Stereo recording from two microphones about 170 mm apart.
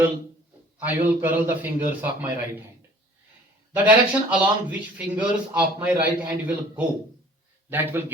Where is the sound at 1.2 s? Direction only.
10° right (ahead or behind).